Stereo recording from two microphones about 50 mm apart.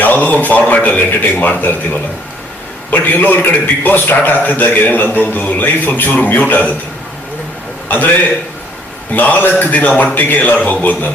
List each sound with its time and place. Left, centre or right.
0.0 s a man's voice: left
7.9 s a man's voice: left
9.1 s a man's voice: left